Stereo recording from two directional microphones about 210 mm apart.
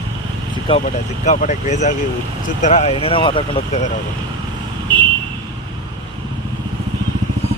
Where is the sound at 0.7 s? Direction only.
25° left (ahead or behind).